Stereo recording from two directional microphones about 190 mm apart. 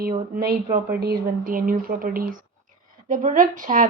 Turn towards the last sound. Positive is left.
turn(degrees=-45)  # may be behind; listen again after turning